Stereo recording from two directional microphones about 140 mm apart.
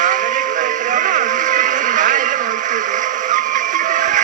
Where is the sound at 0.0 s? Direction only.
65° right (ahead or behind).